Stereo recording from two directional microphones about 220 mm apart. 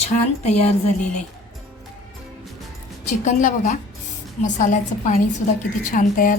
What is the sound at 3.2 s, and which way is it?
A woman's voice, 35° left (ahead or behind).